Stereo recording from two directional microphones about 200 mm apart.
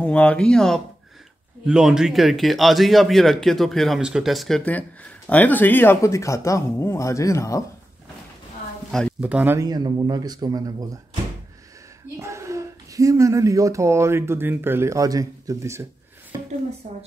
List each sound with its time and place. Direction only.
0.0 s a man's voice: 5° left (ahead or behind)
9.2 s speech: 10° right (ahead or behind)
12.2 s speech: 15° right (ahead or behind)